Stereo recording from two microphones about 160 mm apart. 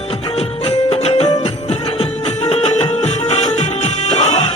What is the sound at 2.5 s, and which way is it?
Music, 40° left (ahead or behind).